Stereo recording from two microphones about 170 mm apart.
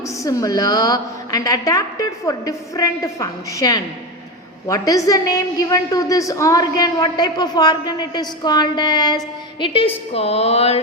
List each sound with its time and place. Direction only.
0.0 s a man's voice: 20° left (ahead or behind); by 10.8 s 35° left (ahead or behind)